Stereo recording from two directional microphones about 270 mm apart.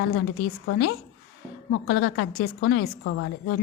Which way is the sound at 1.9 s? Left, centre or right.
Left.